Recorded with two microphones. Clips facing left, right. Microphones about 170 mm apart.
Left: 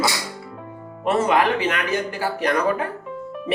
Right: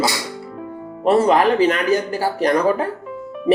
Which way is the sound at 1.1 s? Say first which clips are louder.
Right 5 dB; 35° right (ahead or behind).